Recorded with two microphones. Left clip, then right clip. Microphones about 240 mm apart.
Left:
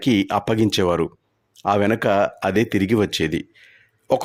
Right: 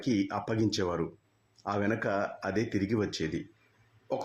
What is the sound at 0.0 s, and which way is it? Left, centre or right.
Speech, left.